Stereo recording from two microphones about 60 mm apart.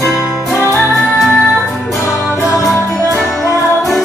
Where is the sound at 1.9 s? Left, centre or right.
Centre.